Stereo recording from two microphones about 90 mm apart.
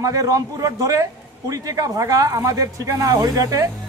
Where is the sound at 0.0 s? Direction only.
40° right (ahead or behind).